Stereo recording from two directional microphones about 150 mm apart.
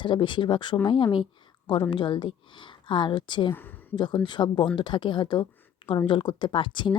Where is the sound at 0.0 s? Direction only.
35° left (ahead or behind).